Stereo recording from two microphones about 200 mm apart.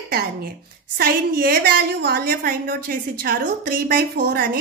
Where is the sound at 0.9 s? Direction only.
45° right (ahead or behind).